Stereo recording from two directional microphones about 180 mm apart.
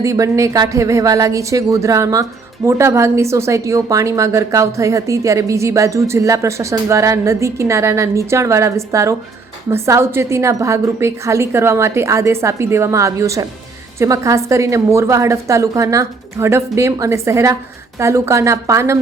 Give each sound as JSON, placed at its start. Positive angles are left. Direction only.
{"t": 0.0, "sound": "a woman's voice", "side_deg": -15}